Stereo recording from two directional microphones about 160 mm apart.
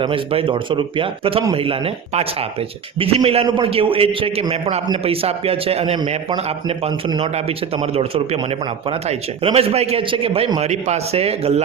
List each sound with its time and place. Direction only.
0.0 s a man's voice: 35° right (ahead or behind)